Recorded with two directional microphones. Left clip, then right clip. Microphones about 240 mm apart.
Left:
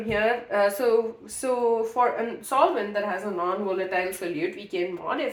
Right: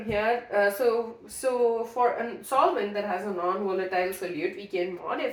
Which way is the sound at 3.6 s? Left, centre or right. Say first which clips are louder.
Left 1 dB; left.